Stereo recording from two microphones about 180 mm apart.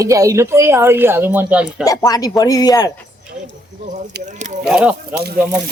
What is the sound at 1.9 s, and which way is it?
Speech, 20° left (ahead or behind).